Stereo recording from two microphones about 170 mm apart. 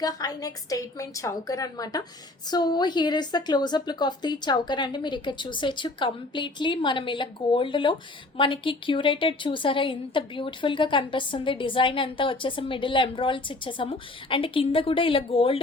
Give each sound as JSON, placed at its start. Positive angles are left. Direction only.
{"t": 0.0, "sound": "a woman's voice", "side_deg": 20}